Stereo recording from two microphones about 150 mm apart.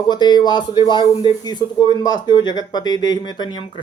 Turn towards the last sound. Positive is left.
turn(degrees=30)  # may be behind; listen again after turning